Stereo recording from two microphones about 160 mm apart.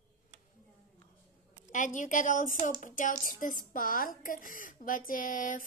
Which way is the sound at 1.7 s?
50° left (ahead or behind).